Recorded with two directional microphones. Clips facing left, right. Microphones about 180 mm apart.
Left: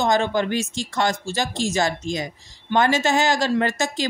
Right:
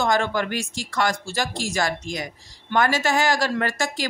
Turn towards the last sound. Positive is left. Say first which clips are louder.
# left 3 dB
turn(degrees=20)  # may be behind; listen again after turning